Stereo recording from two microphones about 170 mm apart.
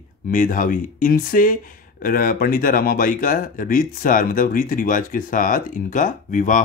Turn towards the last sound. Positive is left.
turn(degrees=50)  # may be behind; listen again after turning